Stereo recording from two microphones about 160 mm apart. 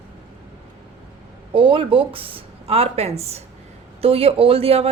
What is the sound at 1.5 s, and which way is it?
Speech, 35° right (ahead or behind).